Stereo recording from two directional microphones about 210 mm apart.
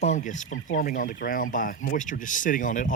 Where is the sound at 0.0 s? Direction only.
35° left (ahead or behind).